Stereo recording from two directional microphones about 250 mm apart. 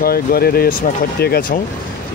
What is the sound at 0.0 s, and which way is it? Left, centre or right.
Speech, left.